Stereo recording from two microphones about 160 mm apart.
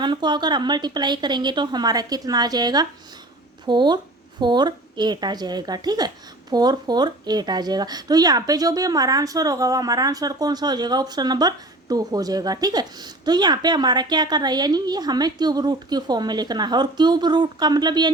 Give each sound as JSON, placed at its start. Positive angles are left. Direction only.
{"t": 0.0, "sound": "speech", "side_deg": -30}